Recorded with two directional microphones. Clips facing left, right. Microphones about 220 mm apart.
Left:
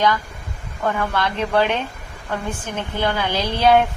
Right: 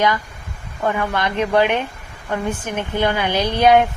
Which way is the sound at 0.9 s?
15° right (ahead or behind).